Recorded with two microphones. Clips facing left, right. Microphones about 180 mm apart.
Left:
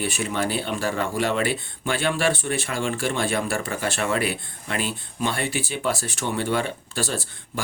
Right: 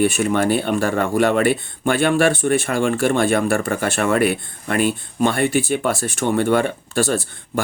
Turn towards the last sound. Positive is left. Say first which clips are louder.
# right 8 dB
turn(degrees=-50)  # may be behind; listen again after turning